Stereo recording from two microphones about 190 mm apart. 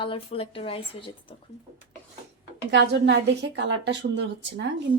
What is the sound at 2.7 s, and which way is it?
A woman's voice, 65° right (ahead or behind).